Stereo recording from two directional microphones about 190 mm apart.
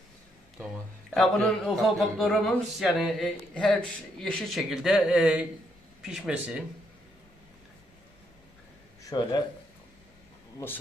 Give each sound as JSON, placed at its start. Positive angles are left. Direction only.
{"t": 1.1, "sound": "speech", "side_deg": 0}
{"t": 9.0, "sound": "speech", "side_deg": 20}